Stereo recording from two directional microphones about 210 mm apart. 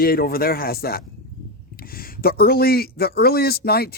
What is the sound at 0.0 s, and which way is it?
Speech, 45° left (ahead or behind).